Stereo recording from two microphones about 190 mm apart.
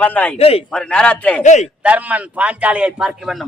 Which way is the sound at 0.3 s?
30° left (ahead or behind).